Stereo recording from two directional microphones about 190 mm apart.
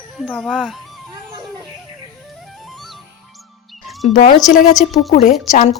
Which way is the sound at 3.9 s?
Centre (ahead or behind).